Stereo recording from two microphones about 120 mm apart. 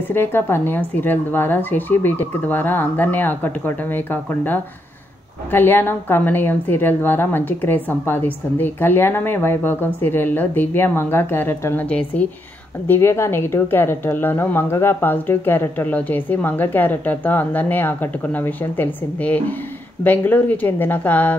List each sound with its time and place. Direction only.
0.1 s a woman's voice: 20° left (ahead or behind)